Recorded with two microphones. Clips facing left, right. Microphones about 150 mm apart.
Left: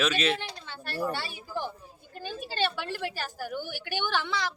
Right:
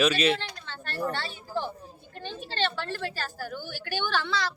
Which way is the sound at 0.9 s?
10° left (ahead or behind).